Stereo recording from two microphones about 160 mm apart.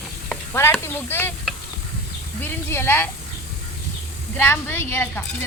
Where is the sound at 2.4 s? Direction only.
15° left (ahead or behind).